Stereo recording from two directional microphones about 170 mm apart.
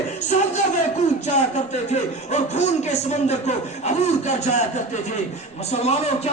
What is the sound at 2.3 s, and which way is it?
Speech, 40° left (ahead or behind).